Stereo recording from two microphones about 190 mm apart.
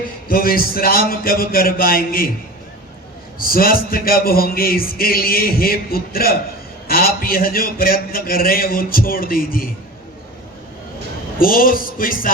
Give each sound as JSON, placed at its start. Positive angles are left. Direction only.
{"t": 0.3, "sound": "a man's voice", "side_deg": 50}
{"t": 3.3, "sound": "a man's voice", "side_deg": 50}
{"t": 11.3, "sound": "a man's voice", "side_deg": 50}